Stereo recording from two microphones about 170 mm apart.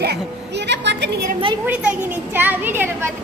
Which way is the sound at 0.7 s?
90° right.